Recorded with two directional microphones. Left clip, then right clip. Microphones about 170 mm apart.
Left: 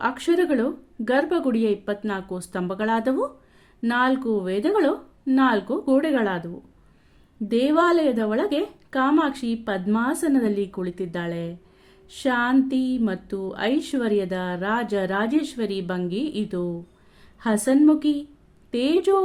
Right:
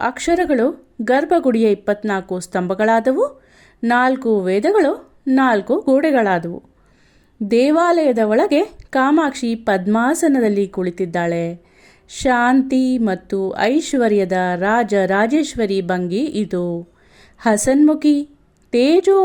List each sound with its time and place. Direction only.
0.0 s a woman's voice: 40° right (ahead or behind)